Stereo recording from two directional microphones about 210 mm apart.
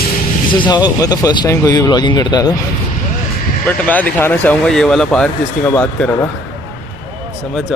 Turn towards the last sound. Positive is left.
turn(degrees=10)  # may be behind; listen again after turning